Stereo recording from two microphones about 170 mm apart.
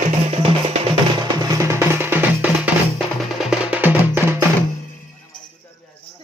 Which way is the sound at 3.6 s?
10° right (ahead or behind).